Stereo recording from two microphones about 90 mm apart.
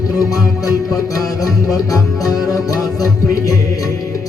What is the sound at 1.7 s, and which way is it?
Music, 40° left (ahead or behind).